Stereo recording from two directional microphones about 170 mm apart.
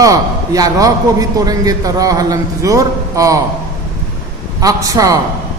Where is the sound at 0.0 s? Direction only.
20° right (ahead or behind).